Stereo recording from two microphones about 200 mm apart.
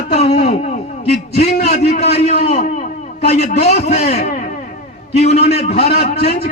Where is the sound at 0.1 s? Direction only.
30° left (ahead or behind).